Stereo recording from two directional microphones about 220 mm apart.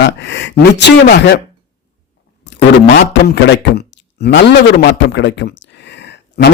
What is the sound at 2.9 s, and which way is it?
Speech, 55° left (ahead or behind).